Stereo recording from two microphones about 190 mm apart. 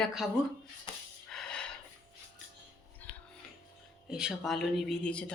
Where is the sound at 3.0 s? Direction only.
10° left (ahead or behind).